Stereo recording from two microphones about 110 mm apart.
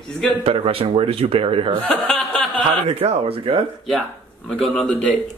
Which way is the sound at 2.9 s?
70° right (ahead or behind).